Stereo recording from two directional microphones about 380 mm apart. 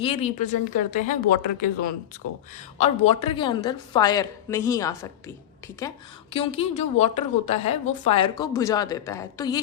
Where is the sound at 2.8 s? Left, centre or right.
Centre.